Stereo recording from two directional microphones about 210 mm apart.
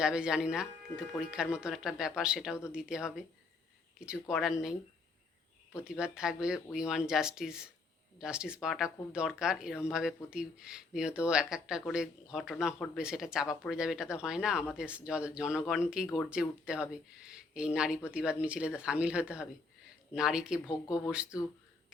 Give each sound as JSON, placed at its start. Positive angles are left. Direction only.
{"t": 0.0, "sound": "speech", "side_deg": -5}
{"t": 5.7, "sound": "speech", "side_deg": -5}